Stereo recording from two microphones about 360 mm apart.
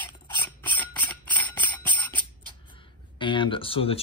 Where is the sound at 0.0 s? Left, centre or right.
Centre.